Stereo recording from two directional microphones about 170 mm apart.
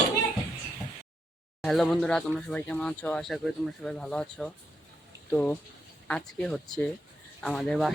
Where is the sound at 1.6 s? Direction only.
Centre (ahead or behind).